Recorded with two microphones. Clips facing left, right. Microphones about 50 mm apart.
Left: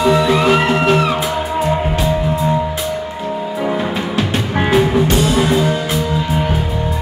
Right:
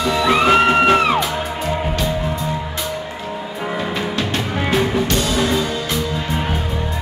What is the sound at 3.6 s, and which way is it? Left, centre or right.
Music, centre.